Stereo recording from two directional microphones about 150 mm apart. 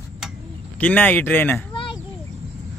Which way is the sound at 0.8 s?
10° left (ahead or behind).